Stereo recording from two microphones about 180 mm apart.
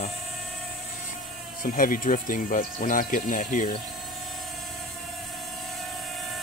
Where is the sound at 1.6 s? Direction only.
50° left (ahead or behind).